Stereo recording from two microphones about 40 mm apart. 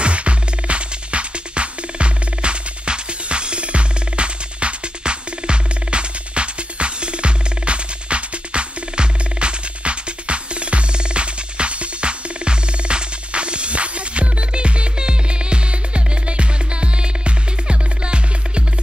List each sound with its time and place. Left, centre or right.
0.0 s music: right